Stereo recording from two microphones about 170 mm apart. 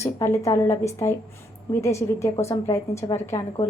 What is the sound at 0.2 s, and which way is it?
A woman's voice, 15° left (ahead or behind).